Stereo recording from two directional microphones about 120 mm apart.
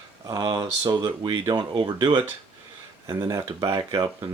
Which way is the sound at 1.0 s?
35° right (ahead or behind).